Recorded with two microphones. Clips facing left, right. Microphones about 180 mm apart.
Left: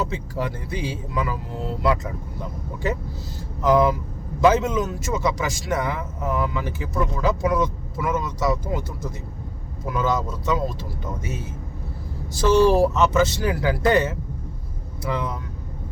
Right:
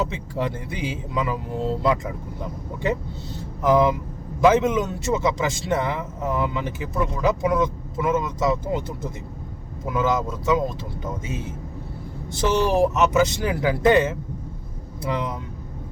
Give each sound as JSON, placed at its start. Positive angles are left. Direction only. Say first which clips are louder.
{"t": 0.1, "sound": "a man's voice", "louder": "right 1 dB", "side_deg": -20}
{"t": 3.7, "sound": "a man's voice", "louder": "even", "side_deg": -20}
{"t": 12.4, "sound": "a man's voice", "louder": "left 3 dB", "side_deg": -20}